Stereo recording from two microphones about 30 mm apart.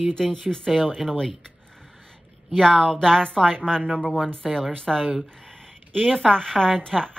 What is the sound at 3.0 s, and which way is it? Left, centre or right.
Speech, left.